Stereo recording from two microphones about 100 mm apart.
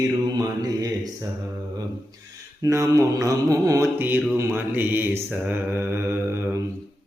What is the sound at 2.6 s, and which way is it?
Mantra, 35° right (ahead or behind).